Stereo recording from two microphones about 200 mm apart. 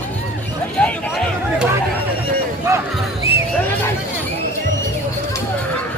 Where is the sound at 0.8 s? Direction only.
Centre (ahead or behind).